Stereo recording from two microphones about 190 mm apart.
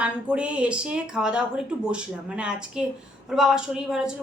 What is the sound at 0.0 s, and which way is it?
A woman's voice, 5° right (ahead or behind).